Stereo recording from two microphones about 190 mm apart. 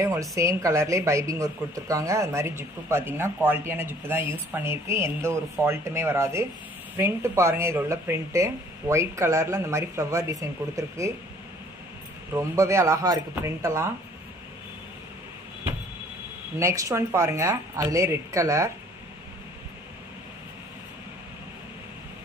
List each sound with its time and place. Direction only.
0.0 s a sound: 15° right (ahead or behind)
0.4 s speech: 15° right (ahead or behind)
12.4 s speech: 15° right (ahead or behind)
16.5 s speech: 15° right (ahead or behind)